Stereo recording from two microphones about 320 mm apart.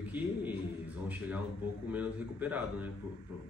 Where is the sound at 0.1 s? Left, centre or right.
Centre.